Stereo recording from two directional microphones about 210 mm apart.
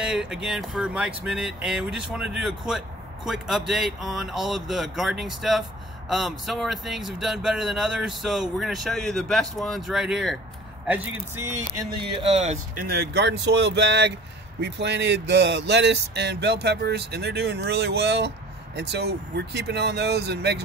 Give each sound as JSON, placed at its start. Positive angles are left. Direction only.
{"t": 0.0, "sound": "speech", "side_deg": -5}
{"t": 11.5, "sound": "a sound", "side_deg": -20}
{"t": 12.1, "sound": "speech", "side_deg": -30}
{"t": 12.8, "sound": "speech", "side_deg": -50}